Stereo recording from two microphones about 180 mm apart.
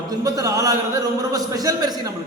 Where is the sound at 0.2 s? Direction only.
20° right (ahead or behind).